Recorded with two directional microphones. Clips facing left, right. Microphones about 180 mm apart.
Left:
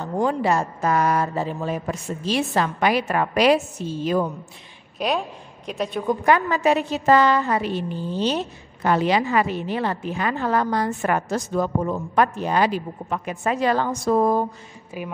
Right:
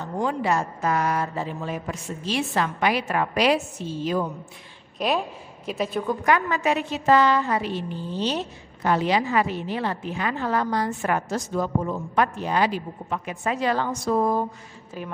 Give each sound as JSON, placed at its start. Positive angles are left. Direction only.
{"t": 0.0, "sound": "speech", "side_deg": 35}
{"t": 4.9, "sound": "a woman's voice", "side_deg": 0}
{"t": 6.2, "sound": "speech", "side_deg": 30}
{"t": 8.8, "sound": "a woman's voice", "side_deg": 65}
{"t": 15.0, "sound": "a woman's voice", "side_deg": 10}